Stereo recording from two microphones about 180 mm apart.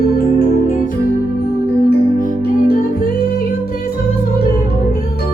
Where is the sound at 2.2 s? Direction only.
50° left (ahead or behind).